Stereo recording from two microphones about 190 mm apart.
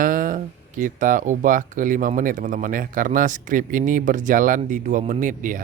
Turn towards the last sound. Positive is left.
turn(degrees=-45)  # may be behind; listen again after turning